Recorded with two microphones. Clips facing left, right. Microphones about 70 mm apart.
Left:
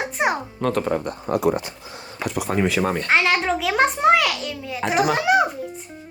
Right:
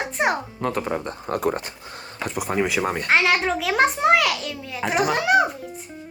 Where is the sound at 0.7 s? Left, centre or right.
Centre.